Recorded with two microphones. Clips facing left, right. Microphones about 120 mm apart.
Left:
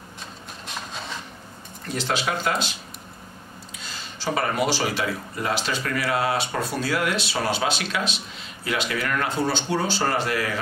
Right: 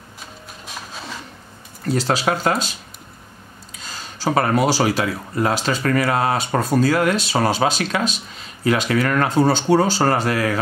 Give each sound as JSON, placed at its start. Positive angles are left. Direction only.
{"t": 2.0, "sound": "speech", "side_deg": -40}
{"t": 4.0, "sound": "speech", "side_deg": -40}